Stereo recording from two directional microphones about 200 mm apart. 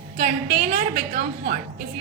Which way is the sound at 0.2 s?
50° right (ahead or behind).